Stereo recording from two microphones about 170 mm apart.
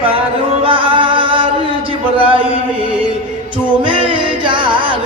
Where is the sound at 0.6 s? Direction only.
30° right (ahead or behind).